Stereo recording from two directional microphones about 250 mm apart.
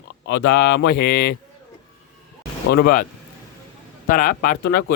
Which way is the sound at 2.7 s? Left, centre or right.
Left.